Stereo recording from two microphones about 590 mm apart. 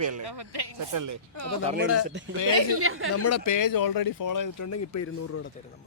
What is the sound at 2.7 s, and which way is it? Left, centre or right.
Speech, right.